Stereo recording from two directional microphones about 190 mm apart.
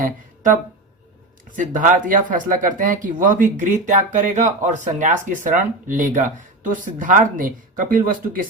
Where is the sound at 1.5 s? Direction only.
45° right (ahead or behind).